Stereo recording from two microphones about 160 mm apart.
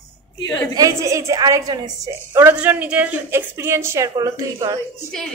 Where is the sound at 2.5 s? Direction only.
5° right (ahead or behind).